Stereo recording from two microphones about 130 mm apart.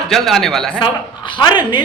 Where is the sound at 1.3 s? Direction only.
35° left (ahead or behind).